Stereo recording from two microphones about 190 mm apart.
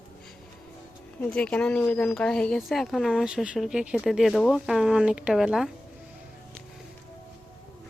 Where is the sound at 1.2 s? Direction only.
5° left (ahead or behind).